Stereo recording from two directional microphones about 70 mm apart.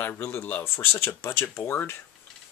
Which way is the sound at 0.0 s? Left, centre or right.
Left.